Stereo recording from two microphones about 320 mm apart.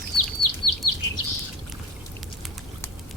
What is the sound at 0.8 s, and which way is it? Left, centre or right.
Bird, left.